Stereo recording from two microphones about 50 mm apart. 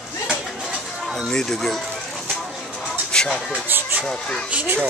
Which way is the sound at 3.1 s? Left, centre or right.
Centre.